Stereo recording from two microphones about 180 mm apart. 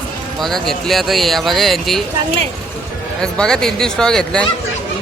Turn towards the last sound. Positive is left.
turn(degrees=5)  # may be behind; listen again after turning